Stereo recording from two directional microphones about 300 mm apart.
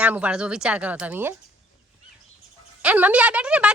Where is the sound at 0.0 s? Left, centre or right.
Centre.